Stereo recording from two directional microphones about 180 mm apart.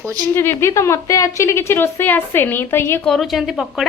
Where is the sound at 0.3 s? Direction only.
15° left (ahead or behind).